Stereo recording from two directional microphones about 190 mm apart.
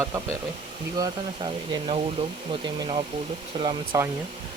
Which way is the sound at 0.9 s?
25° right (ahead or behind).